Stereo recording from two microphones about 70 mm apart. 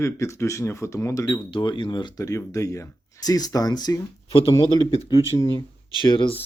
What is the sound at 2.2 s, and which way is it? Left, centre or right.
Speech, left.